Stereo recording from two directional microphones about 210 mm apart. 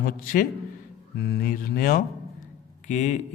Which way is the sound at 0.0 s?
40° left (ahead or behind).